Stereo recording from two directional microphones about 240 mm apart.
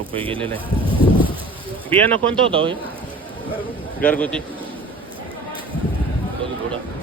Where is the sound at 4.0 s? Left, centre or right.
Centre.